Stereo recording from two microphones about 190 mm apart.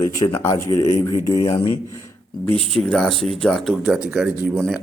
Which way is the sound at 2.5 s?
5° left (ahead or behind).